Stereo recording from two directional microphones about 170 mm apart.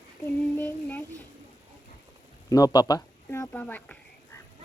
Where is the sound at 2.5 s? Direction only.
20° left (ahead or behind).